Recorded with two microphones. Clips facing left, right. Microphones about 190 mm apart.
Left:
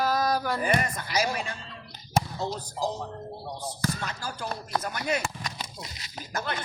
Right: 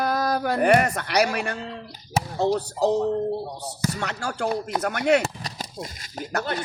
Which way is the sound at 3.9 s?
70° right (ahead or behind).